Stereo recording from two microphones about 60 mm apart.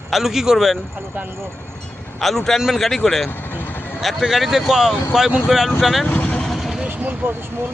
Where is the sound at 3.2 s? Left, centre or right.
Left.